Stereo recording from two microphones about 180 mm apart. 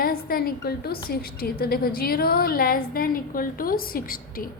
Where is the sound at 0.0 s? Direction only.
55° left (ahead or behind).